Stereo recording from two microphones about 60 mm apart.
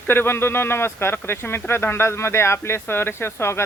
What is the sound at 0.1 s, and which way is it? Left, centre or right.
Speech, left.